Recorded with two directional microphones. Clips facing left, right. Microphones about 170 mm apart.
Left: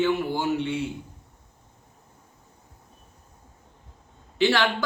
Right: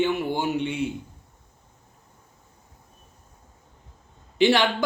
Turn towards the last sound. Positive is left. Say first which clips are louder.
# right 2 dB
turn(degrees=-15)  # may be behind; listen again after turning